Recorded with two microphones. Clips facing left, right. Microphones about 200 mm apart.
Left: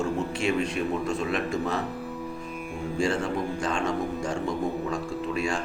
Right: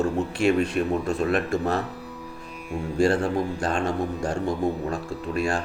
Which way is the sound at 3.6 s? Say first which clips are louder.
Right 2 dB; 60° right (ahead or behind).